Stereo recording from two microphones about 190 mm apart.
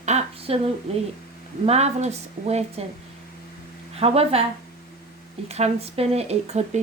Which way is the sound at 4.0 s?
30° right (ahead or behind).